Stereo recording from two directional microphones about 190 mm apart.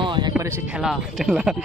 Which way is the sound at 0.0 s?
25° right (ahead or behind).